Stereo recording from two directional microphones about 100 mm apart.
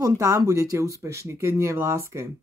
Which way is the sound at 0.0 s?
35° right (ahead or behind).